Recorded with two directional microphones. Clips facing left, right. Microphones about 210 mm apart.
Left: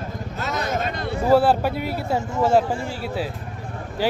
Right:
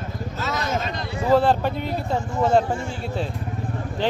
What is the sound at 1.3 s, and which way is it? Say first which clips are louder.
Speech: left 1 dB; 10° left (ahead or behind).